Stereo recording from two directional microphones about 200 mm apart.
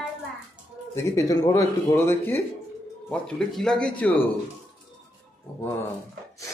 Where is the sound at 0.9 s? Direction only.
15° left (ahead or behind).